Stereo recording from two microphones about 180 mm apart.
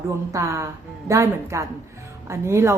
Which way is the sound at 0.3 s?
15° right (ahead or behind).